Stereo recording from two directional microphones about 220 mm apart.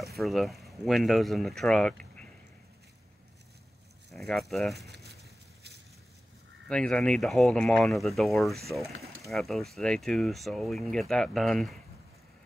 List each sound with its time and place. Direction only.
0.0 s speech: centre (ahead or behind)
4.1 s speech: centre (ahead or behind)
4.8 s a sound: 50° right (ahead or behind)
6.7 s speech: 5° left (ahead or behind)